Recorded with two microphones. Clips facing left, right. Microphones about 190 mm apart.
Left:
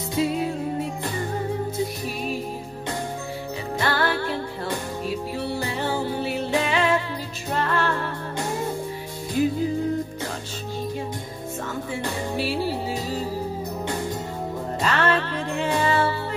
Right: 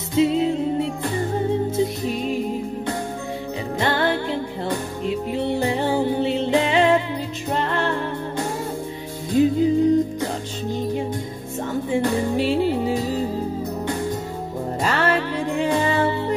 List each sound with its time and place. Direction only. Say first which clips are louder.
0.1 s music: right 6 dB; 25° right (ahead or behind)
2.0 s music: right 5 dB; 20° right (ahead or behind)
3.8 s music: right 3 dB; 20° right (ahead or behind)
9.3 s music: right 6 dB; 20° right (ahead or behind)
11.9 s music: right 9 dB; 20° right (ahead or behind)
14.9 s music: right 1 dB; 10° right (ahead or behind)